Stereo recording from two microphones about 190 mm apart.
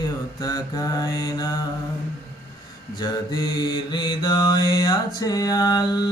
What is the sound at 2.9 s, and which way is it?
Mantra, 20° left (ahead or behind).